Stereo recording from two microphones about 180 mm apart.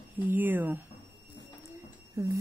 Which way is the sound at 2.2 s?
15° right (ahead or behind).